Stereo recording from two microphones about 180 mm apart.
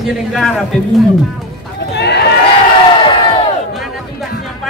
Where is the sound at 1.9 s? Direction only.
70° left (ahead or behind).